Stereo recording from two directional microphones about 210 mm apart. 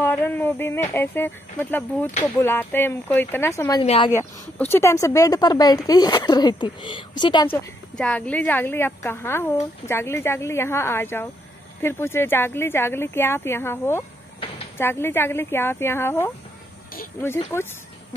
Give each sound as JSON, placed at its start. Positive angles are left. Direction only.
{"t": 0.0, "sound": "a woman's voice", "side_deg": 10}
{"t": 3.8, "sound": "speech", "side_deg": 30}
{"t": 4.1, "sound": "a woman's voice", "side_deg": 10}
{"t": 7.4, "sound": "a woman's voice", "side_deg": 10}